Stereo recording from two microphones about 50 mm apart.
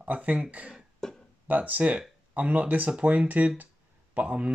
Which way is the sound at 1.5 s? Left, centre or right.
Right.